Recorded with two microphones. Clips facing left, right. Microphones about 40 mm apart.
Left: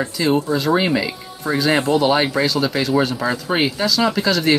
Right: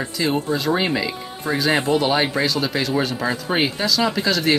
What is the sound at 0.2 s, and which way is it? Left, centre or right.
Speech, centre.